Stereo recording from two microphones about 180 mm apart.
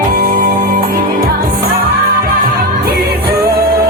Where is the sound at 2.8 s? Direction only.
60° right (ahead or behind).